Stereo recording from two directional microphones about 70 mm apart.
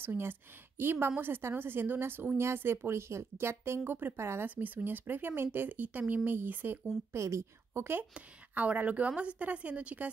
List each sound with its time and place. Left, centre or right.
0.0 s a woman's voice: right
4.5 s speech: right
7.1 s a woman's voice: right
8.1 s speech: right